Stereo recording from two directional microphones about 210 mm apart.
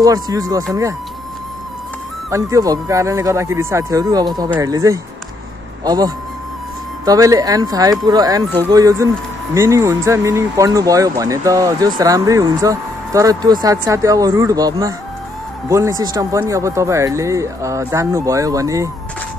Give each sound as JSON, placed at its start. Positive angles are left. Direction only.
{"t": 0.0, "sound": "speech", "side_deg": -15}
{"t": 2.3, "sound": "speech", "side_deg": -15}